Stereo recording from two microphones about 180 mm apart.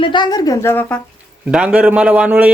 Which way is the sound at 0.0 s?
25° left (ahead or behind).